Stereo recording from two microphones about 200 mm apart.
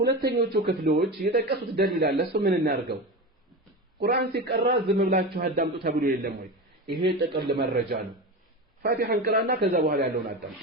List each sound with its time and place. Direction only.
0.0 s a man's voice: 55° right (ahead or behind)
4.0 s a man's voice: 55° right (ahead or behind)
4.9 s a man's voice: 40° right (ahead or behind)